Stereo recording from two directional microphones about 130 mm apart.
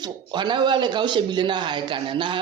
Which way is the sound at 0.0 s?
35° right (ahead or behind).